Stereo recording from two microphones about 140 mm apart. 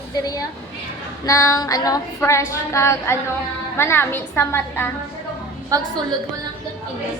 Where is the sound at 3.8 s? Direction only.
15° left (ahead or behind).